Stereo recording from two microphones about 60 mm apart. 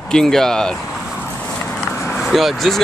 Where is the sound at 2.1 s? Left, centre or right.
Centre.